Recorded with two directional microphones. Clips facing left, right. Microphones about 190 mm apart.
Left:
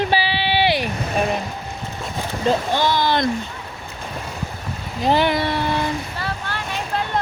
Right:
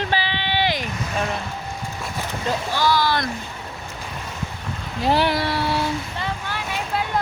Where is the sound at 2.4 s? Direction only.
20° left (ahead or behind).